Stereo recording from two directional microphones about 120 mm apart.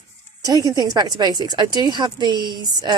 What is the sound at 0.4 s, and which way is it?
A woman's voice, 35° right (ahead or behind).